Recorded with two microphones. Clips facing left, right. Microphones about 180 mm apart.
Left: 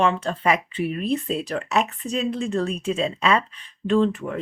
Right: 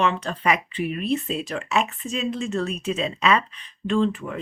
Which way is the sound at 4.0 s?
50° left (ahead or behind).